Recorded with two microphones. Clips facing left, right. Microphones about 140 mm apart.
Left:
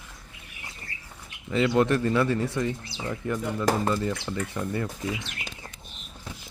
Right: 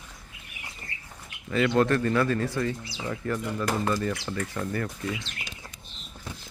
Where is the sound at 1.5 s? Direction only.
15° left (ahead or behind).